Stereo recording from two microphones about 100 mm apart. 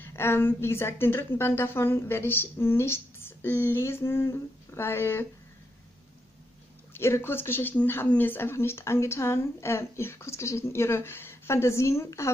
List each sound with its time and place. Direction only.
0.0 s speech: 25° left (ahead or behind)
6.9 s speech: 25° left (ahead or behind)